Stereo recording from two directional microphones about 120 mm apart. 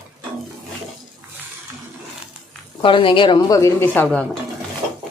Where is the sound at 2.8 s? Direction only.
45° left (ahead or behind).